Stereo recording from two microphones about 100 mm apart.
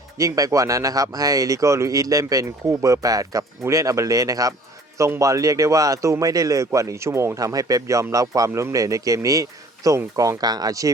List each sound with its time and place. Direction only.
0.2 s speech: 35° right (ahead or behind)